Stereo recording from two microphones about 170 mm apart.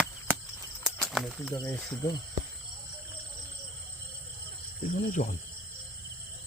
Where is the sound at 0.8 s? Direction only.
Centre (ahead or behind).